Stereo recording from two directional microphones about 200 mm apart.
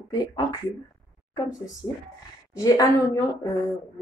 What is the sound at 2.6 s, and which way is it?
Speech, 20° left (ahead or behind).